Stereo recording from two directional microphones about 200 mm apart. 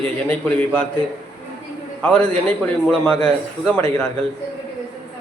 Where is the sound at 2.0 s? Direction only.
5° left (ahead or behind).